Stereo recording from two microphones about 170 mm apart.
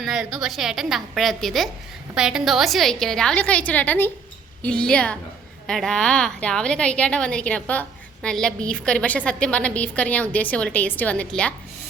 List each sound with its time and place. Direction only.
0.0 s a woman's voice: 5° right (ahead or behind)